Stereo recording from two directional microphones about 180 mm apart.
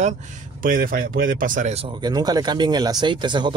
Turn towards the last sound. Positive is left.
turn(degrees=-25)  # may be behind; listen again after turning